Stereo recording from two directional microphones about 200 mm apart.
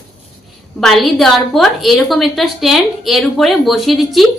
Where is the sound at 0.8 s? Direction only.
Centre (ahead or behind).